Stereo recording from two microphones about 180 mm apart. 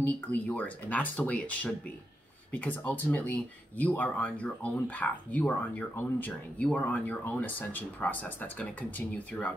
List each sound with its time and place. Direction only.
0.0 s speech: 10° left (ahead or behind)